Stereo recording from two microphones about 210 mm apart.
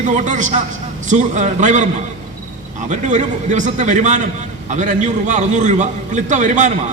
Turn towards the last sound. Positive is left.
turn(degrees=-35)  # may be behind; listen again after turning